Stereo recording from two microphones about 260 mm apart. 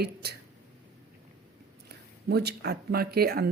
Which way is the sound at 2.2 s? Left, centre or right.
Right.